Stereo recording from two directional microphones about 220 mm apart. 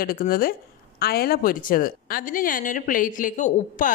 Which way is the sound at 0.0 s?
40° left (ahead or behind).